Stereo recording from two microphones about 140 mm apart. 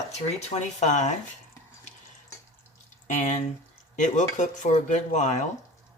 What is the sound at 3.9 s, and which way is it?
Speech, 60° left (ahead or behind).